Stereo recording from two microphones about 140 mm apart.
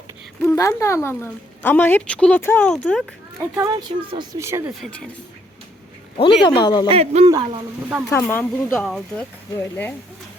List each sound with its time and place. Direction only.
0.4 s a woman's voice: 20° left (ahead or behind); by 3.0 s 5° left (ahead or behind)
4.1 s speech: 35° right (ahead or behind)
4.4 s speech: 20° right (ahead or behind)
6.1 s speech: 35° left (ahead or behind)
6.8 s speech: 45° right (ahead or behind)
7.3 s speech: 25° right (ahead or behind)
8.1 s a woman's voice: 15° left (ahead or behind)
8.7 s speech: centre (ahead or behind)
9.6 s a woman's voice: 15° left (ahead or behind)